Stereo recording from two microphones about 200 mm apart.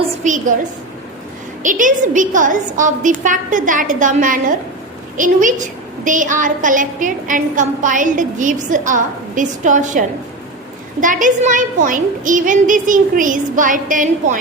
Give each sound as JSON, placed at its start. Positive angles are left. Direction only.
{"t": 0.0, "sound": "a woman's voice", "side_deg": -40}
{"t": 1.6, "sound": "a woman's voice", "side_deg": -40}
{"t": 11.0, "sound": "a woman's voice", "side_deg": -40}